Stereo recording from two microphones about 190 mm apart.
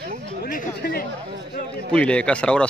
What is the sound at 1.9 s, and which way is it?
Speech, 5° left (ahead or behind).